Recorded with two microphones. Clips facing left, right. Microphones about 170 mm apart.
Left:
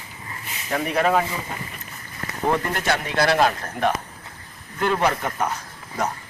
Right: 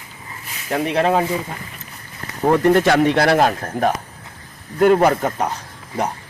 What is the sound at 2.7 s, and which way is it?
Speech, 90° right.